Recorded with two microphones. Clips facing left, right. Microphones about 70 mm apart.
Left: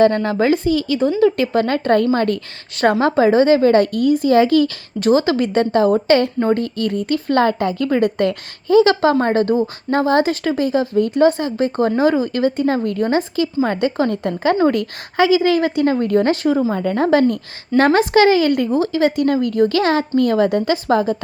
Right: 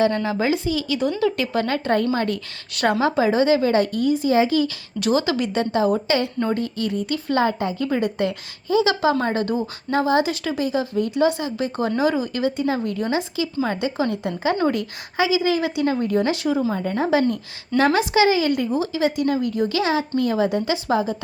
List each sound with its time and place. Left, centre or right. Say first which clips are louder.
0.0 s speech: left 6 dB; left
4.9 s a woman's voice: left 6 dB; left
7.4 s speech: left 5 dB; left
16.7 s speech: left 5 dB; left